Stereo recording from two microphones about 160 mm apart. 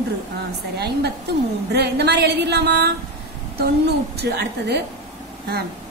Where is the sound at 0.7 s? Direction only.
90° right.